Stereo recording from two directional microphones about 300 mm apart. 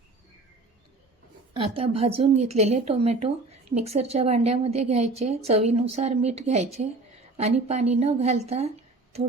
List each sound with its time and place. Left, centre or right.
1.5 s a woman's voice: centre